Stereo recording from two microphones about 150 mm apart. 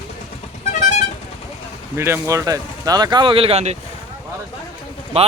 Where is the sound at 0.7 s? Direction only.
55° left (ahead or behind).